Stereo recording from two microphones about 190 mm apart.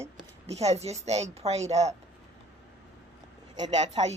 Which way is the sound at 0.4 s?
35° right (ahead or behind).